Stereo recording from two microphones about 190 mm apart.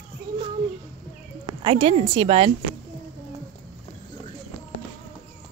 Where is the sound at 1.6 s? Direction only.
30° right (ahead or behind).